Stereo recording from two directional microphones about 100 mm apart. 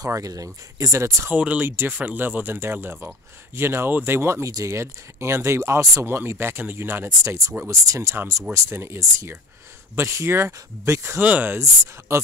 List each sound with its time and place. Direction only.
0.0 s speech: 35° right (ahead or behind)
1.3 s speech: 15° right (ahead or behind)
7.2 s speech: 30° right (ahead or behind)